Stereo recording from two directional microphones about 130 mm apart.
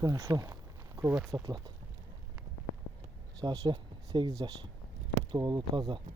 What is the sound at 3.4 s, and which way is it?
Speech, 35° right (ahead or behind).